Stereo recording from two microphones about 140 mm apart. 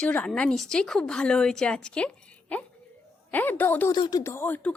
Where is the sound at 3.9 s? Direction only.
30° left (ahead or behind).